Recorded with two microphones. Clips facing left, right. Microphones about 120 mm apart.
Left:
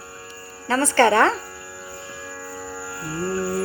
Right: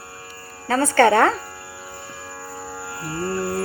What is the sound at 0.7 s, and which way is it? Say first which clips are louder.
Speech: right 1 dB; 50° right (ahead or behind).